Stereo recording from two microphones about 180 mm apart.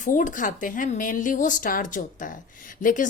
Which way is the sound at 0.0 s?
45° left (ahead or behind).